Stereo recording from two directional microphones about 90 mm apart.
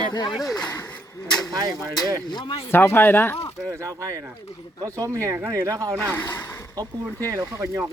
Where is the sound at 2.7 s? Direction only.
25° left (ahead or behind).